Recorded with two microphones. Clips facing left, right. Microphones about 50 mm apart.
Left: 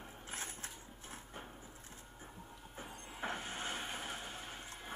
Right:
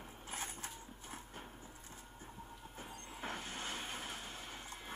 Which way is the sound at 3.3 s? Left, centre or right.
Left.